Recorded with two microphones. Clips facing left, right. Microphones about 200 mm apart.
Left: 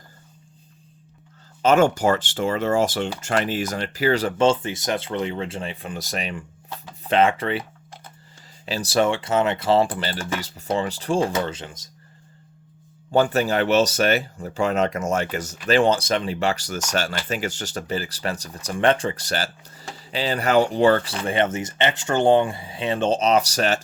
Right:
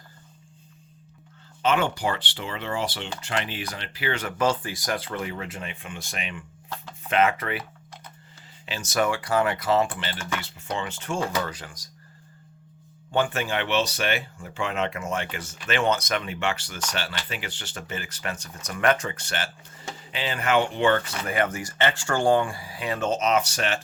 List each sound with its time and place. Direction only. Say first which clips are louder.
1.6 s speech: left 7 dB; 45° left (ahead or behind); by 7.6 s 30° left (ahead or behind)
8.6 s speech: left 5 dB; 35° left (ahead or behind)
13.1 s speech: left 6 dB; 40° left (ahead or behind)